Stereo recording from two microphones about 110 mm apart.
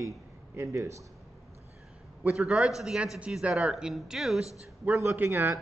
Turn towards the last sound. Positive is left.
turn(degrees=-20)  # may be behind; listen again after turning